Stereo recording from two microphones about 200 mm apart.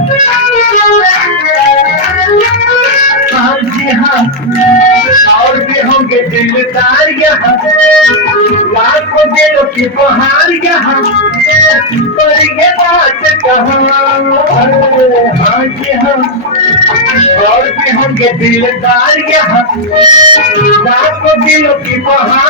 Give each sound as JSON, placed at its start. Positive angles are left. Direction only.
{"t": 20.0, "sound": "music", "side_deg": -20}